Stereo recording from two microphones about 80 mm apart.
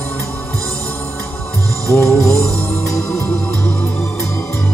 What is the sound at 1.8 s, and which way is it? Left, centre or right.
Music, centre.